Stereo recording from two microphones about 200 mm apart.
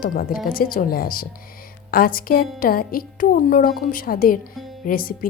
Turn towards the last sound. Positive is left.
turn(degrees=45)  # may be behind; listen again after turning